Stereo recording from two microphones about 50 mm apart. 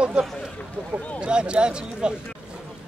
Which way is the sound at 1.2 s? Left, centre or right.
Centre.